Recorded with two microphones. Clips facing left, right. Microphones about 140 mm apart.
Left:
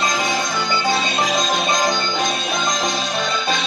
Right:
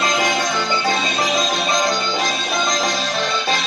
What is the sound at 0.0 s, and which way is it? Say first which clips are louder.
Music: right 2 dB; centre (ahead or behind).